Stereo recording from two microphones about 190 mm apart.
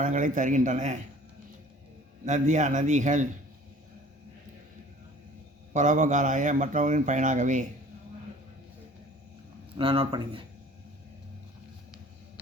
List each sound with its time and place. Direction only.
0.0 s speech: 40° right (ahead or behind)
2.2 s speech: 40° right (ahead or behind)
5.7 s speech: 40° right (ahead or behind)
9.7 s speech: 30° right (ahead or behind)